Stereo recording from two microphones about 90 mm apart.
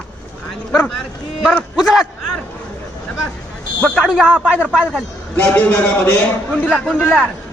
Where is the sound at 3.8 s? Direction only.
10° left (ahead or behind).